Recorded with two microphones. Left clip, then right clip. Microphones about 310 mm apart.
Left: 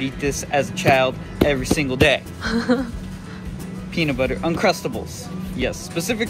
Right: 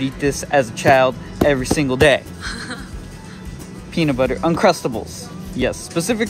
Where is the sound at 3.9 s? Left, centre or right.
Right.